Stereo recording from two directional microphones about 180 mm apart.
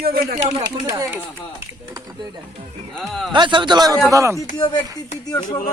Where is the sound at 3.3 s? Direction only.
25° right (ahead or behind).